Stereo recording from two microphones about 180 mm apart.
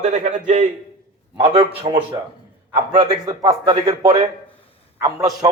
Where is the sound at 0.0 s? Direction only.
40° right (ahead or behind).